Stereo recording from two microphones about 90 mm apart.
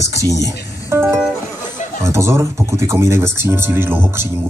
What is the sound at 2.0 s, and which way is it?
Speech, 35° right (ahead or behind).